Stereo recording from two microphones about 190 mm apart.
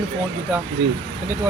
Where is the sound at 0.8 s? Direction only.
70° right (ahead or behind).